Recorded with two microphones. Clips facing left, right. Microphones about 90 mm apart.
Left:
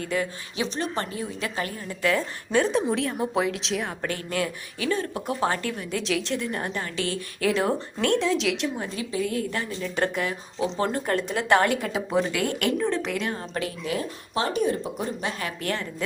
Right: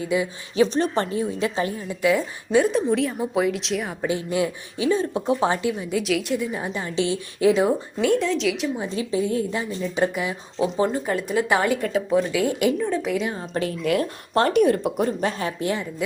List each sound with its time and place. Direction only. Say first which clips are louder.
0.0 s speech: right 4 dB; 10° right (ahead or behind)
0.5 s a woman's voice: right 9 dB; 35° right (ahead or behind); by 3.9 s centre (ahead or behind)
4.0 s speech: right 5 dB; 15° right (ahead or behind)
6.0 s speech: right 3 dB; 5° right (ahead or behind)
6.8 s a woman's voice: right 5 dB; 20° right (ahead or behind)
7.7 s speech: right 3 dB; 5° right (ahead or behind)
9.0 s a woman's voice: right 5 dB; 25° right (ahead or behind)
9.5 s speech: right 3 dB; 15° right (ahead or behind)
13.8 s speech: right 7 dB; 60° right (ahead or behind)
15.2 s a woman's voice: right 6 dB; 35° right (ahead or behind)
15.7 s speech: right 4 dB; 15° right (ahead or behind)